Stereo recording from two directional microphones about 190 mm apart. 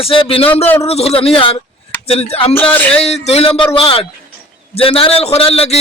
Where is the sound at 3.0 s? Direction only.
35° left (ahead or behind).